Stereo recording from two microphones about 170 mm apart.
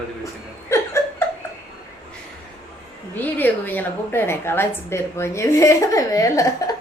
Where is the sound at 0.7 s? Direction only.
15° left (ahead or behind).